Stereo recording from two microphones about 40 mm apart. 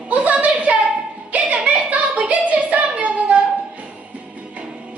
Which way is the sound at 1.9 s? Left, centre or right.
Right.